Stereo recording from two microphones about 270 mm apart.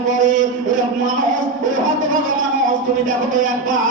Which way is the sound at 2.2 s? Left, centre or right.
Right.